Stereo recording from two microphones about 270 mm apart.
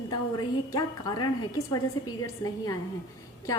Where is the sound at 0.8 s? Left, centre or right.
Centre.